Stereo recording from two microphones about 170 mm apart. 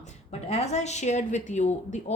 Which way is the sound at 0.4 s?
40° left (ahead or behind).